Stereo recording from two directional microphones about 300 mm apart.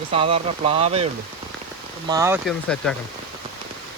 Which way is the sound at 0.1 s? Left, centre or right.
Centre.